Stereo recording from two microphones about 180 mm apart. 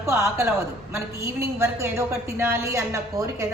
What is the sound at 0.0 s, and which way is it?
A woman's voice, 15° right (ahead or behind).